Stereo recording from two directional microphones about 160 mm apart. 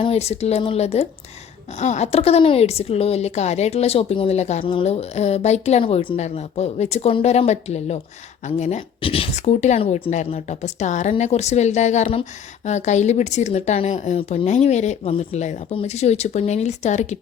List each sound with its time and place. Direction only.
0.0 s speech: 40° left (ahead or behind)